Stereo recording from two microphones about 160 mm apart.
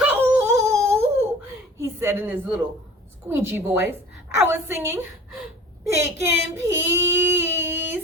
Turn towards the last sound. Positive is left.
turn(degrees=-15)  # may be behind; listen again after turning